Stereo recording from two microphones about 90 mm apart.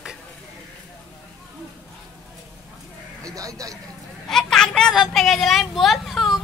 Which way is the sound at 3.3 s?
40° right (ahead or behind).